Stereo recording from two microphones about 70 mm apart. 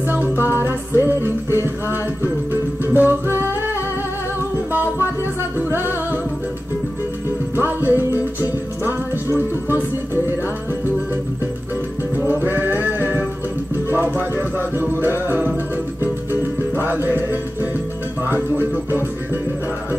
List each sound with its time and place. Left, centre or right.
0.1 s music: right
5.7 s music: right
7.5 s music: right
12.3 s music: right